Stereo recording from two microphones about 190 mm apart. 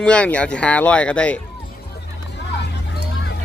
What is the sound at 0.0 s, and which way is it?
Speech, 5° left (ahead or behind).